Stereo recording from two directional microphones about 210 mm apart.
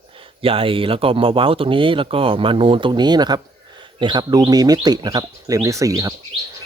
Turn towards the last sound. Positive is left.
turn(degrees=-15)  # may be behind; listen again after turning